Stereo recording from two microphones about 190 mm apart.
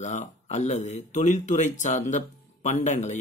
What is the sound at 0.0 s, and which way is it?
Speech, 40° left (ahead or behind).